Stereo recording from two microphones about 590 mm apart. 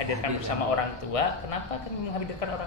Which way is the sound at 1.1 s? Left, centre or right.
Left.